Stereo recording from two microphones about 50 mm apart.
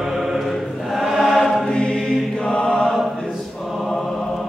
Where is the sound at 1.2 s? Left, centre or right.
Centre.